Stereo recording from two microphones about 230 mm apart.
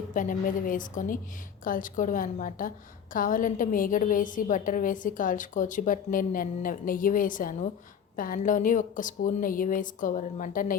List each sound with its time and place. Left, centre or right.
0.1 s a woman's voice: left